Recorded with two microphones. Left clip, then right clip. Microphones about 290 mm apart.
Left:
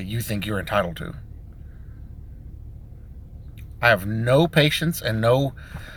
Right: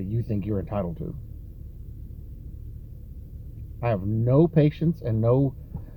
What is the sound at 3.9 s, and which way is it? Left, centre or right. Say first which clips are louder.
Speech: left 5 dB; left.